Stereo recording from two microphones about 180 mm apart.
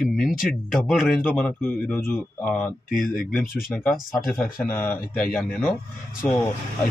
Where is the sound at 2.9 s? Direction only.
50° left (ahead or behind).